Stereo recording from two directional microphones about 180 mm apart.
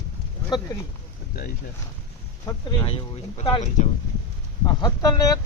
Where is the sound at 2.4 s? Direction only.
25° left (ahead or behind).